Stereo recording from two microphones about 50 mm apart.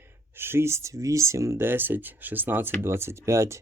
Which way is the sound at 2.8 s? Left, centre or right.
Right.